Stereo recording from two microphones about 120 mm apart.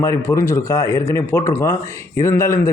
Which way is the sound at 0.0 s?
25° left (ahead or behind).